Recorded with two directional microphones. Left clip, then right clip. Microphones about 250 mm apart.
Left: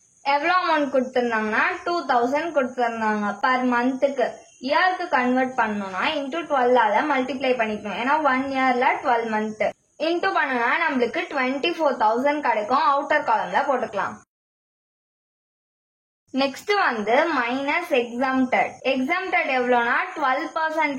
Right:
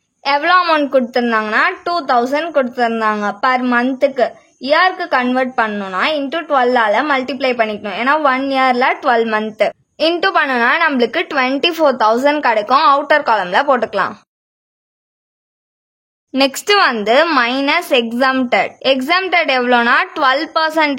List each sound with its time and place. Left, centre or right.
0.2 s a woman's voice: right
16.3 s a woman's voice: right